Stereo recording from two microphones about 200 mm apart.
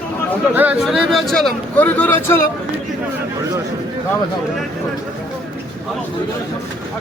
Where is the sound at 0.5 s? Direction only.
5° right (ahead or behind); by 2.4 s 10° left (ahead or behind).